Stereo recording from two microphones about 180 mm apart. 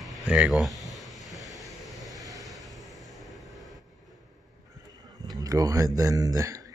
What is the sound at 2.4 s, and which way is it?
Vehicle, centre (ahead or behind).